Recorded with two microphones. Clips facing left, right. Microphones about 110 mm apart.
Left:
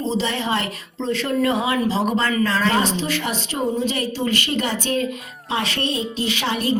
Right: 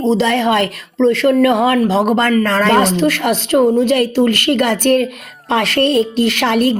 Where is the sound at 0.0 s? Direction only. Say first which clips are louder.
Right 9 dB; 75° right (ahead or behind).